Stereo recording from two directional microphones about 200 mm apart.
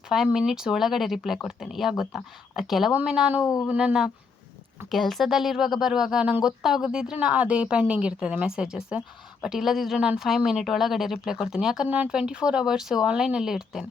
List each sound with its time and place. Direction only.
0.1 s speech: 5° right (ahead or behind)
3.4 s speech: 15° left (ahead or behind)
3.7 s speech: 5° right (ahead or behind)